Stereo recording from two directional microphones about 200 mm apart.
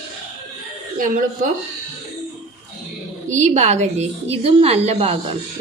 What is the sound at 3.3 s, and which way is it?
A woman's voice, 35° right (ahead or behind).